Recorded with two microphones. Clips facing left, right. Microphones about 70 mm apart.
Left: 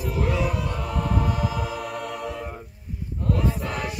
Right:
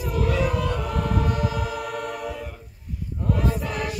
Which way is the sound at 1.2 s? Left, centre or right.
Centre.